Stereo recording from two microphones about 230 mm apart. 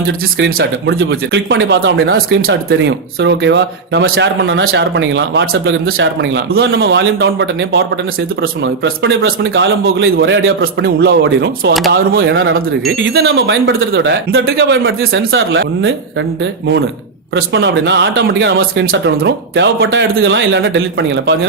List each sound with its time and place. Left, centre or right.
0.3 s speech: right
6.7 s a man's voice: right
17.3 s speech: right